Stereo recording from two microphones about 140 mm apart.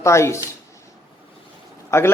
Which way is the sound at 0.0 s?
20° left (ahead or behind).